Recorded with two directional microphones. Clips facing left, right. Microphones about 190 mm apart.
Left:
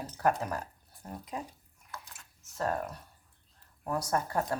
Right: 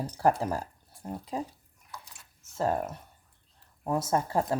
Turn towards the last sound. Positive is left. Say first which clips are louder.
# right 4 dB
turn(degrees=-25)  # may be behind; listen again after turning